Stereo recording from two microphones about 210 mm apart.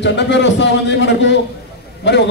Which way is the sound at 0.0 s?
55° left (ahead or behind).